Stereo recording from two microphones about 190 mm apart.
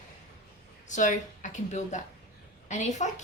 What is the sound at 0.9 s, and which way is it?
Speech, 40° left (ahead or behind).